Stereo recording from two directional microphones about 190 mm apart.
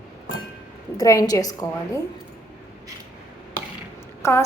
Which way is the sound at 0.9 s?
20° left (ahead or behind).